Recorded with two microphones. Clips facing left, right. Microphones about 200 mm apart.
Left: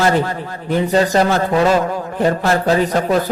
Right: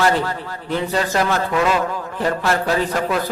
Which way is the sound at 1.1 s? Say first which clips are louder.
Left 4 dB; 30° left (ahead or behind).